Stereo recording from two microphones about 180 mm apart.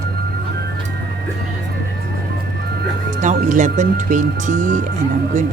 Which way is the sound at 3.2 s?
45° right (ahead or behind).